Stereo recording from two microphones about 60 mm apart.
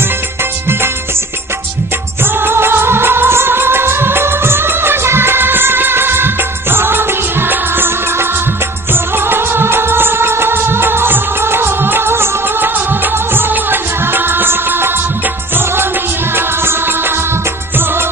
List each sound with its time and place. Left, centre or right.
2.2 s music of bollywood: right
15.5 s music: right